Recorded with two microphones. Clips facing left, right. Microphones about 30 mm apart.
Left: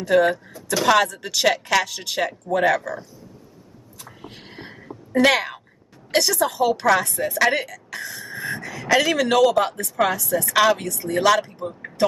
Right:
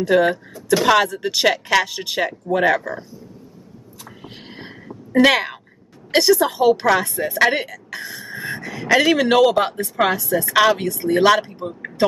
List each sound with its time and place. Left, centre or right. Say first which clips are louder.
0.0 s speech: right 2 dB; centre
4.6 s a sound: even; centre
6.1 s a woman's voice: right 4 dB; centre
9.0 s speech: right 4 dB; right
10.2 s speech: right 2 dB; centre
10.8 s speech: right 5 dB; right